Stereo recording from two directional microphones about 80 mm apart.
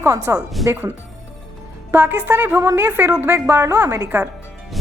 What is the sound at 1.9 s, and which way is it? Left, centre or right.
A woman's voice, right.